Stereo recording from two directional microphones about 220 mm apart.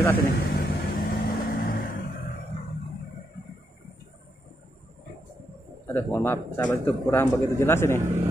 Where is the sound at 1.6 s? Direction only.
40° left (ahead or behind).